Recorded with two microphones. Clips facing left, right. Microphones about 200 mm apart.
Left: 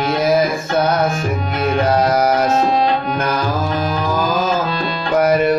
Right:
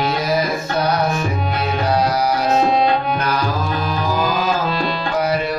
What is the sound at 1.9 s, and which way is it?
Music, 50° left (ahead or behind).